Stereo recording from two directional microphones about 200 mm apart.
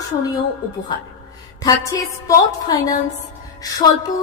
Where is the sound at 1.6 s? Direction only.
15° left (ahead or behind).